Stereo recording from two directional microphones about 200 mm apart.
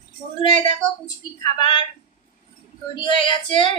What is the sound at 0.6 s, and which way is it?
Speech, 20° left (ahead or behind).